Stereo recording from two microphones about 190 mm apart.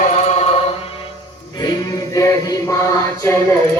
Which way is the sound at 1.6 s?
20° left (ahead or behind).